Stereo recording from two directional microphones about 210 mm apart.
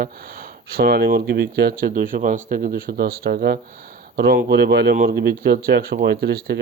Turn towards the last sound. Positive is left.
turn(degrees=-50)  # may be behind; listen again after turning